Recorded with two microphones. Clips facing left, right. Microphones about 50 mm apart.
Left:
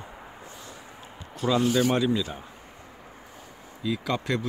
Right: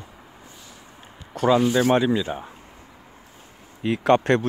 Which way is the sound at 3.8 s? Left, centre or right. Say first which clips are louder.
Right 10 dB; right.